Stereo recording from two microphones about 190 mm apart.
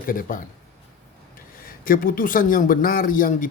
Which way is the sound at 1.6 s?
50° left (ahead or behind).